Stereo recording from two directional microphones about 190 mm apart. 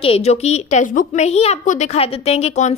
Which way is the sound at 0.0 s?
30° left (ahead or behind).